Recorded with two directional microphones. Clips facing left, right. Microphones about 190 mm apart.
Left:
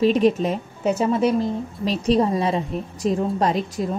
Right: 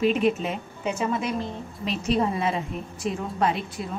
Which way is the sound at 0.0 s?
35° left (ahead or behind).